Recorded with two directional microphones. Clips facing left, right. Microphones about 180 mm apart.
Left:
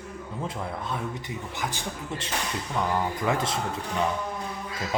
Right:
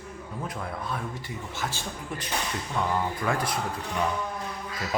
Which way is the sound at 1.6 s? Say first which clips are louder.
Left 1 dB; 15° left (ahead or behind).